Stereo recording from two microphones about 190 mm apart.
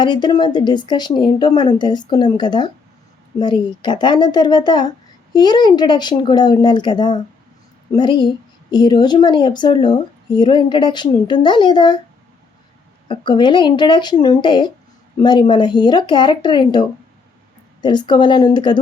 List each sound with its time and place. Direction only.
0.0 s speech: 20° left (ahead or behind)
13.1 s speech: 25° left (ahead or behind)
17.8 s speech: 25° left (ahead or behind)